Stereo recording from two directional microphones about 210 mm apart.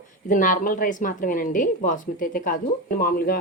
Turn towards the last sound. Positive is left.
turn(degrees=40)  # may be behind; listen again after turning